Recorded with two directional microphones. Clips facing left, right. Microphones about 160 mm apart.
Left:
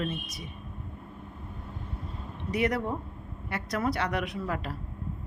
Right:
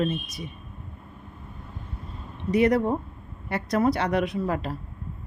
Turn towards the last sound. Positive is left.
turn(degrees=-30)  # may be behind; listen again after turning